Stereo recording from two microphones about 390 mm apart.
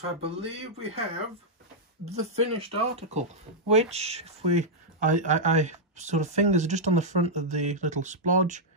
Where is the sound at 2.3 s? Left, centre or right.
Centre.